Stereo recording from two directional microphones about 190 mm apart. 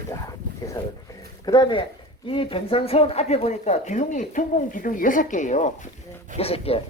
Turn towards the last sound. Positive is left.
turn(degrees=30)  # may be behind; listen again after turning